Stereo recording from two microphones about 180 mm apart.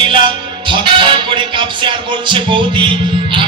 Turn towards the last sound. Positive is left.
turn(degrees=-25)  # may be behind; listen again after turning